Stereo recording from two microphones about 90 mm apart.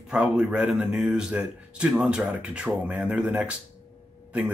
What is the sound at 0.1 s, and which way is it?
Speech, 10° right (ahead or behind).